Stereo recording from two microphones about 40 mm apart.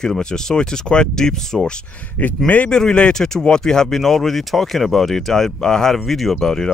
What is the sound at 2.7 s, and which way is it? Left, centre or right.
Speech, centre.